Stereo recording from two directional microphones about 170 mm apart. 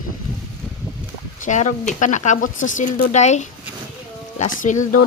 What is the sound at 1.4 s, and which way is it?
Speech, 45° left (ahead or behind).